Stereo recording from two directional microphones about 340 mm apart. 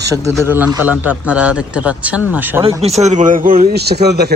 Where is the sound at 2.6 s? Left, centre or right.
Centre.